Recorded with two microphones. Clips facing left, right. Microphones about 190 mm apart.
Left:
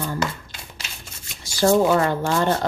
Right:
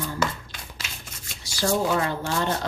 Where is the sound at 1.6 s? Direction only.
50° left (ahead or behind).